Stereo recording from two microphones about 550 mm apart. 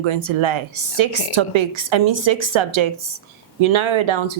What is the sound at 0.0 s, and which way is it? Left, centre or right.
Speech, right.